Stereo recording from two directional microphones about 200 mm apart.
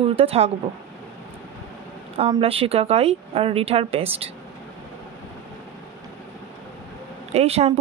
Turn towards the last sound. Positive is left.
turn(degrees=-30)  # may be behind; listen again after turning